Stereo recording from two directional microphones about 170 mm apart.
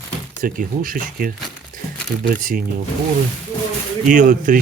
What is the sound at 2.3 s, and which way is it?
Speech, 55° right (ahead or behind).